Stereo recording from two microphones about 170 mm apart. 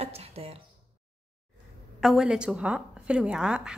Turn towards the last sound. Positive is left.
turn(degrees=-5)  # may be behind; listen again after turning